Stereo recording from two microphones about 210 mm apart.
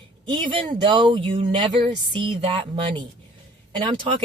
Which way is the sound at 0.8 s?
20° right (ahead or behind).